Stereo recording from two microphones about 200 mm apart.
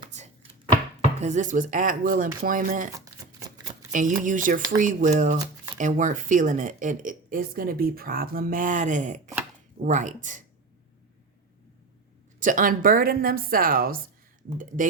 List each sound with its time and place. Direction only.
0.1 s chopping: 35° right (ahead or behind)
1.2 s speech: 35° right (ahead or behind)
3.9 s speech: 40° right (ahead or behind)
12.4 s speech: 40° right (ahead or behind)